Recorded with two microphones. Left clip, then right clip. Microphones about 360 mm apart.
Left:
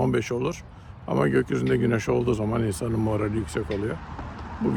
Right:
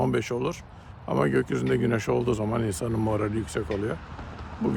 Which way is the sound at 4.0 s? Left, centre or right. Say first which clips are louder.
Left 3 dB; centre.